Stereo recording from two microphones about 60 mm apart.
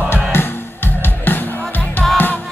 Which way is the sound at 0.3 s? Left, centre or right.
Left.